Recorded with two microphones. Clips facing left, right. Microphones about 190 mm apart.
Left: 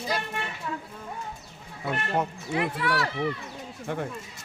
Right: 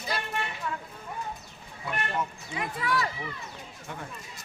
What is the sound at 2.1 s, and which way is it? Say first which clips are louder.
Speech: left 6 dB; 65° left (ahead or behind).